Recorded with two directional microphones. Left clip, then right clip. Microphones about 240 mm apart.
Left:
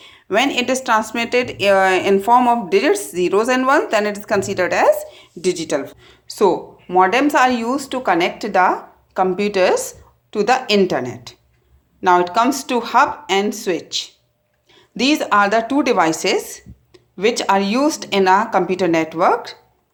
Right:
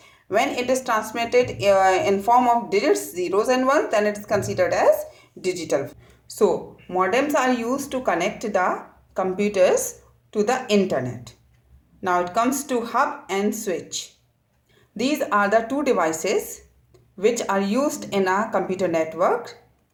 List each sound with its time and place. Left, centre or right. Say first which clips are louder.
0.0 s a woman's voice: left 4 dB; left